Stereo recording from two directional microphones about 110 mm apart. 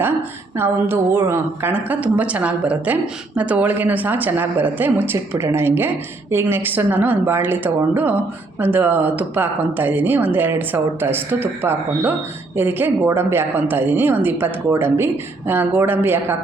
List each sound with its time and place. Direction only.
0.5 s a woman's voice: 20° right (ahead or behind)